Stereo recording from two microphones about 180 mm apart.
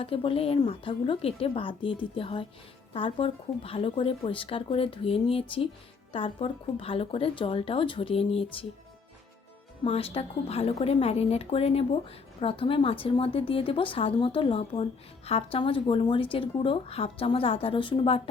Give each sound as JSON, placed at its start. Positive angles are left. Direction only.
{"t": 0.0, "sound": "speech", "side_deg": 30}
{"t": 9.8, "sound": "speech", "side_deg": 35}